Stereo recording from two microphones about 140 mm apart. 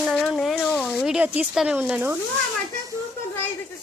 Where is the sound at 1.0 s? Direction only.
10° right (ahead or behind).